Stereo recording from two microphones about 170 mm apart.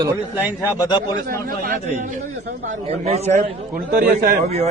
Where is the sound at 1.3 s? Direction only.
55° right (ahead or behind); by 3.2 s 40° right (ahead or behind).